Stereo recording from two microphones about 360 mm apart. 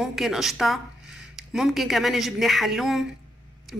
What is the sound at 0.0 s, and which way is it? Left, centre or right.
A woman's voice, centre.